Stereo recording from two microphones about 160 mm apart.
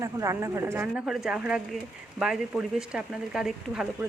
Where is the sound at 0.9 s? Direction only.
5° right (ahead or behind).